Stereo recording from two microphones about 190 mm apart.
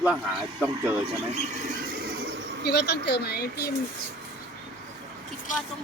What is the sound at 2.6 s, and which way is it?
Speech, 60° left (ahead or behind).